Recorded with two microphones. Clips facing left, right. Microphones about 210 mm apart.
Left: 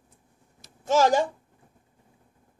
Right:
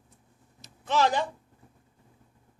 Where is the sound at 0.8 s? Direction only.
45° left (ahead or behind).